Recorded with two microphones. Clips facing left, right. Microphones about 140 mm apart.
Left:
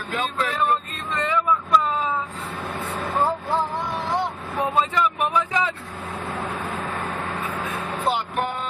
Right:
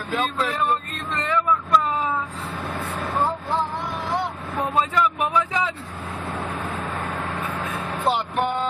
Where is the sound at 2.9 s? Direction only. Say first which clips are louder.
Left 2 dB; centre (ahead or behind).